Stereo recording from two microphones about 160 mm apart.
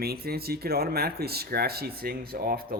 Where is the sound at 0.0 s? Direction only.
75° right (ahead or behind).